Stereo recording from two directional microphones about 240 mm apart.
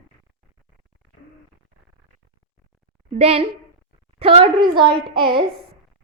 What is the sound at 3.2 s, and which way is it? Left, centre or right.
A woman's voice, right.